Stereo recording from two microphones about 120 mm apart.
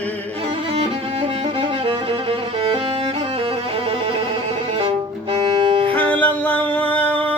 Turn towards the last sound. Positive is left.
turn(degrees=10)  # may be behind; listen again after turning